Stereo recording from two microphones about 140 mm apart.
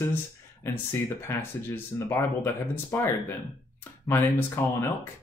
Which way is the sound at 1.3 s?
15° left (ahead or behind).